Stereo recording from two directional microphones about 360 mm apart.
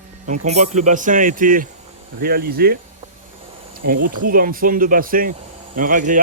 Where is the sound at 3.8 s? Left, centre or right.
Right.